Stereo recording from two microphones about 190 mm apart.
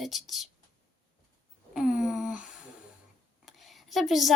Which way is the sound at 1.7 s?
5° right (ahead or behind).